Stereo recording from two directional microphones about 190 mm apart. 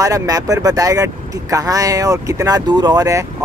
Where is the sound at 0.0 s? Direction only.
20° right (ahead or behind).